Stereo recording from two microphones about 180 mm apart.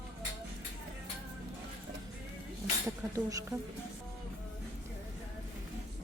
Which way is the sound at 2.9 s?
15° right (ahead or behind).